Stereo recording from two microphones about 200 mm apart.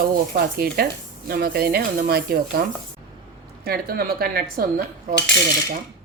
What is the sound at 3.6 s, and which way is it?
Speech, 50° right (ahead or behind).